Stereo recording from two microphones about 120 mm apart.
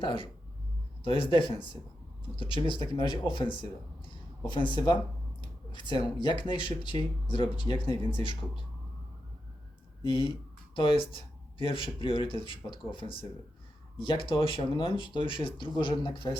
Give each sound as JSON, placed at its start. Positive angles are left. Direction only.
{"t": 0.0, "sound": "speech", "side_deg": 45}
{"t": 10.0, "sound": "speech", "side_deg": 45}